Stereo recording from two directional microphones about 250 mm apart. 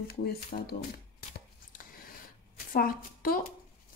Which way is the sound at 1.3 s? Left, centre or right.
Left.